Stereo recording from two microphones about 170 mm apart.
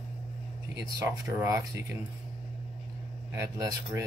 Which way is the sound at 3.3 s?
15° right (ahead or behind).